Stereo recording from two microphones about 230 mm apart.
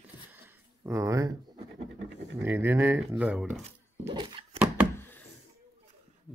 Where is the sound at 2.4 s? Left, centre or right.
Centre.